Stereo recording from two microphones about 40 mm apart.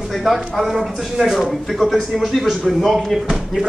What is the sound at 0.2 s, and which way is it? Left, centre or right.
Speech, centre.